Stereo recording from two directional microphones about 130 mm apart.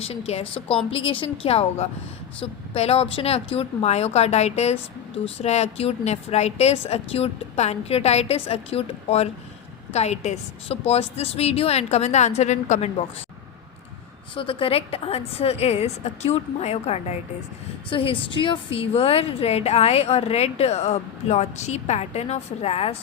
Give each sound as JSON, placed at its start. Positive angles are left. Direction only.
{"t": 0.0, "sound": "a woman's voice", "side_deg": 50}
{"t": 14.3, "sound": "speech", "side_deg": 45}
{"t": 17.8, "sound": "speech", "side_deg": 40}